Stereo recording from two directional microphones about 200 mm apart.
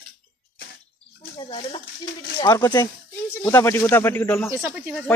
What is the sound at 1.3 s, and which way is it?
Speech, 25° left (ahead or behind).